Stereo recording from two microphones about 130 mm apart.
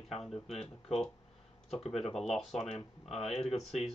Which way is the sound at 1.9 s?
Centre (ahead or behind).